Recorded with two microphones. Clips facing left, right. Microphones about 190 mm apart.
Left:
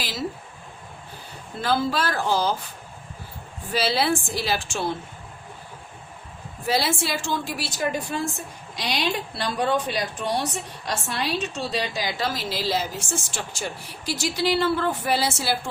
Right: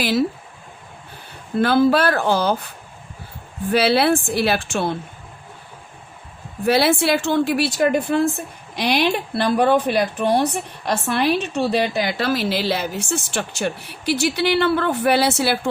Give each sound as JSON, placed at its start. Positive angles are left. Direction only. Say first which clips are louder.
{"t": 0.0, "sound": "a woman's voice", "louder": "right 11 dB", "side_deg": -60}
{"t": 1.5, "sound": "a woman's voice", "louder": "right 8 dB", "side_deg": -60}
{"t": 3.7, "sound": "a woman's voice", "louder": "right 7 dB", "side_deg": -60}
{"t": 6.7, "sound": "a woman's voice", "louder": "right 8 dB", "side_deg": -65}